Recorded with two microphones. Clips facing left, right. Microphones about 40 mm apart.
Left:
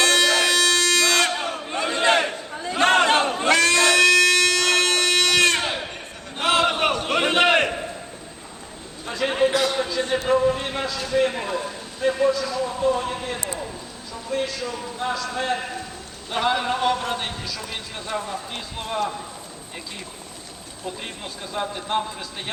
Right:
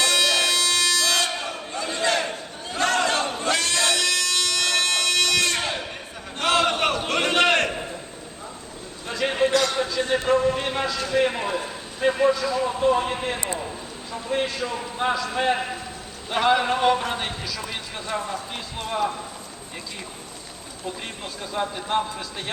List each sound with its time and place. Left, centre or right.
0.0 s music: left
1.4 s crowd: left
3.5 s a sound: left
5.5 s a sound: centre
9.0 s a sound: centre
11.1 s a man's voice: centre; by 14.5 s right
15.1 s a man's voice: centre
16.3 s a man's voice: centre
21.4 s a man's voice: centre